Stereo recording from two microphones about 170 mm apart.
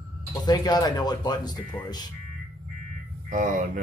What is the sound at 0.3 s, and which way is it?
Speech, 25° left (ahead or behind).